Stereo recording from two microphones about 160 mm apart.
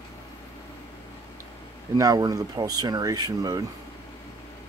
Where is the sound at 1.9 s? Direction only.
25° right (ahead or behind).